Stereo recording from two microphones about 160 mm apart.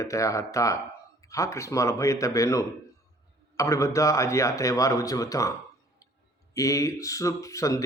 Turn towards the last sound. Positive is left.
turn(degrees=20)  # may be behind; listen again after turning